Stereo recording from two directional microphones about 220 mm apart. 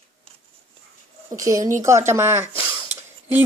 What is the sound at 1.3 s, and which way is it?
Speech, 15° right (ahead or behind).